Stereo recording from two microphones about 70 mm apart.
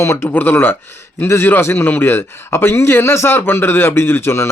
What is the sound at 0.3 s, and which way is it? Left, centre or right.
A man's voice, left.